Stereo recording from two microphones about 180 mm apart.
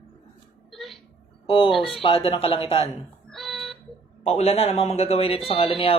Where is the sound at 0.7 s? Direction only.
Centre (ahead or behind).